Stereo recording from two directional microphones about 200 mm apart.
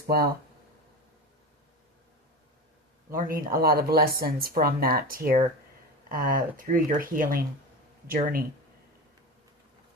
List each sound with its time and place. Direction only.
0.1 s speech: 50° right (ahead or behind)
3.1 s speech: 45° right (ahead or behind)